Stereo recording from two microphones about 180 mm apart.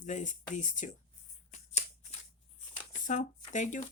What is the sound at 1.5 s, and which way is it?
Shuffling cards, 40° left (ahead or behind).